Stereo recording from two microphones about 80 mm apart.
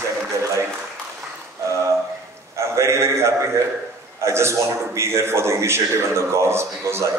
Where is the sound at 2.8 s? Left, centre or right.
Right.